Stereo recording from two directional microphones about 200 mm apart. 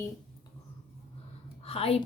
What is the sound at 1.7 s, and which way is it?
Speech, 30° left (ahead or behind).